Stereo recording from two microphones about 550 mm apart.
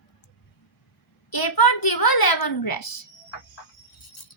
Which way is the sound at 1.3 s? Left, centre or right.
Left.